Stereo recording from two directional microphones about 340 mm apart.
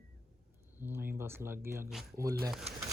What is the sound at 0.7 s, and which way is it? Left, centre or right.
Speech, centre.